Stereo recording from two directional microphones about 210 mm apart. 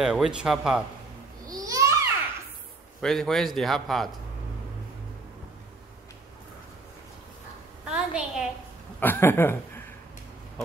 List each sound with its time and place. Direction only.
0.0 s speech: 5° right (ahead or behind)
1.5 s babbling: 15° right (ahead or behind)
3.0 s speech: centre (ahead or behind)
7.8 s a sound: 5° right (ahead or behind)
9.0 s speech: 10° left (ahead or behind)